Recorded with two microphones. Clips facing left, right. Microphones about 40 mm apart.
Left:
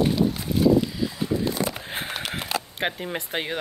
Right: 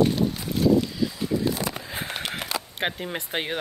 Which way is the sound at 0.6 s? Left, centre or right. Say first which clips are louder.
Left 1 dB; centre.